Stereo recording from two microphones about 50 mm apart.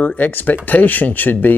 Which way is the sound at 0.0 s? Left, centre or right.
Left.